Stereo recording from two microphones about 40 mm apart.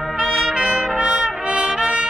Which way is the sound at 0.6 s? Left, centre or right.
Right.